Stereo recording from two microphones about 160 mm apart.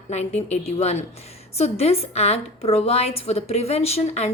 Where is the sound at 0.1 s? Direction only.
45° left (ahead or behind).